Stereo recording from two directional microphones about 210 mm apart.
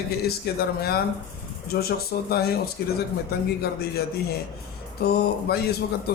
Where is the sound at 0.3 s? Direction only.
50° left (ahead or behind).